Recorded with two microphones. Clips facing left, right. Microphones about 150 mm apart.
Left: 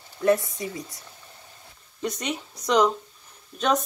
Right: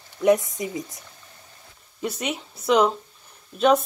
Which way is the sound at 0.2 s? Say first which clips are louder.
Right 3 dB; 20° right (ahead or behind).